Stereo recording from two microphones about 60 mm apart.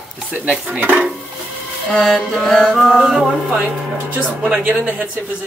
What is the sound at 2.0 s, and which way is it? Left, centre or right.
Music, centre.